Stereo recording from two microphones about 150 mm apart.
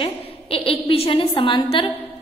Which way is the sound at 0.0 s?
40° left (ahead or behind).